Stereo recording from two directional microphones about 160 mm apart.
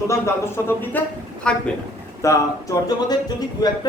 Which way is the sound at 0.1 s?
15° left (ahead or behind).